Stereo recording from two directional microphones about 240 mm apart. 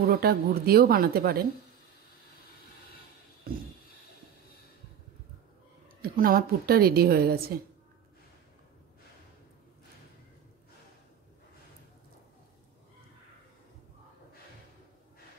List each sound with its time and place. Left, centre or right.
0.0 s a woman's voice: right
3.5 s a sound: right
6.0 s a woman's voice: right